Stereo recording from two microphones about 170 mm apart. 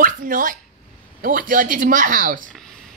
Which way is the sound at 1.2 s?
55° right (ahead or behind).